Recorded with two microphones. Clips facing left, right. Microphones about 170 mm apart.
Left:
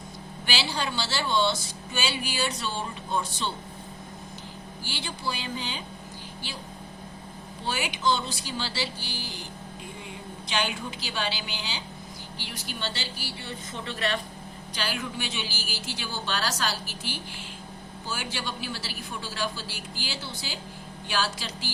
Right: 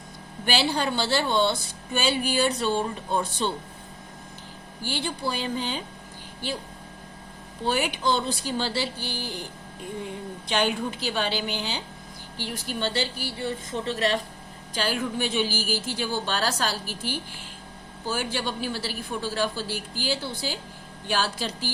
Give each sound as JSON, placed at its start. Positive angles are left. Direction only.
{"t": 0.4, "sound": "a woman's voice", "side_deg": -55}
{"t": 4.8, "sound": "a woman's voice", "side_deg": -50}
{"t": 7.6, "sound": "a woman's voice", "side_deg": -50}
{"t": 10.5, "sound": "a woman's voice", "side_deg": -50}
{"t": 13.7, "sound": "a woman's voice", "side_deg": -35}
{"t": 14.8, "sound": "a woman's voice", "side_deg": -45}